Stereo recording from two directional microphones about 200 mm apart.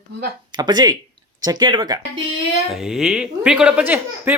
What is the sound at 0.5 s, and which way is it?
Speech, 20° right (ahead or behind).